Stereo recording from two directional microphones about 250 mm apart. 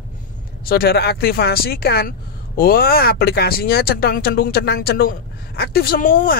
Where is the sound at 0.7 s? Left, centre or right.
Left.